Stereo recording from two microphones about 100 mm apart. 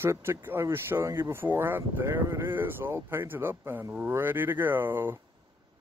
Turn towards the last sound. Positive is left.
turn(degrees=-20)  # may be behind; listen again after turning